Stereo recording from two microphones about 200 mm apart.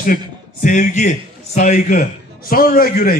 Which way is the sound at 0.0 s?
40° left (ahead or behind).